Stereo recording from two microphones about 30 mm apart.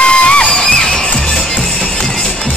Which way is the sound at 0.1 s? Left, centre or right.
Left.